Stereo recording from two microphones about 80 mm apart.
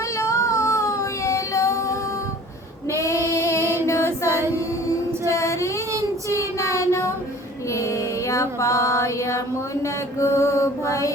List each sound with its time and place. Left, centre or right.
0.2 s child singing: left
2.9 s female singing: left
3.3 s music: left
3.8 s female singing: left
5.2 s child singing: left
7.7 s music: left
9.8 s mantra: left